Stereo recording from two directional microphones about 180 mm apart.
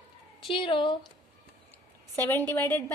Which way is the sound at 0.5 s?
30° left (ahead or behind).